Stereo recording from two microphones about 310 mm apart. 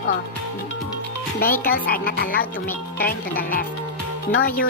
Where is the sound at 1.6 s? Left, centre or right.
Left.